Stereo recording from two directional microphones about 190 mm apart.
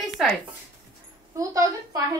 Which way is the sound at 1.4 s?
20° right (ahead or behind).